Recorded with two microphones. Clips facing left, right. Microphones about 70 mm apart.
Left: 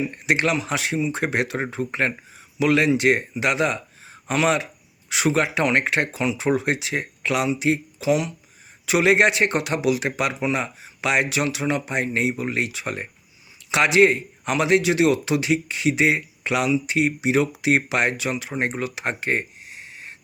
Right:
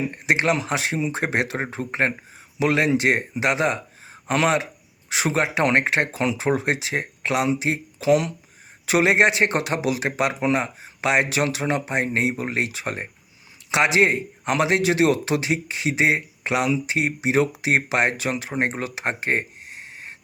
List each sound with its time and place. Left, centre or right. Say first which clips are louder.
0.1 s a man's voice: right 1 dB; right
8.9 s a man's voice: even; right